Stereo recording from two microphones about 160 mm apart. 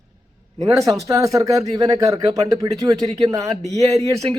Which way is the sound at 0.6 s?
20° right (ahead or behind).